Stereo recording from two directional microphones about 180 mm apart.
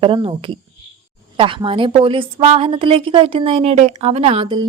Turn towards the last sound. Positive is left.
turn(degrees=-30)  # may be behind; listen again after turning